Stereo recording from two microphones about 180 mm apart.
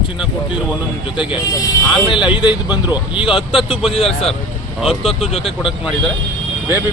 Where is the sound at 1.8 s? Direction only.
25° left (ahead or behind).